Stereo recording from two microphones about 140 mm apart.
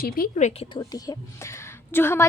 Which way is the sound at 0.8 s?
25° left (ahead or behind).